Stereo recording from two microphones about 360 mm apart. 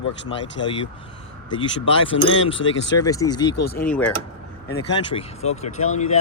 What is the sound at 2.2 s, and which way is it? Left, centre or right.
Speech, centre.